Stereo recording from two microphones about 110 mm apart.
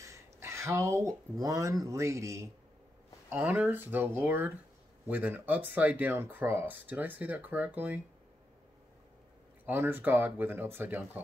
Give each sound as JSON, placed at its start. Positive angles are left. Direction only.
{"t": 0.0, "sound": "a sound", "side_deg": -25}
{"t": 1.4, "sound": "speech", "side_deg": -30}
{"t": 3.3, "sound": "speech", "side_deg": -15}
{"t": 9.7, "sound": "speech", "side_deg": -20}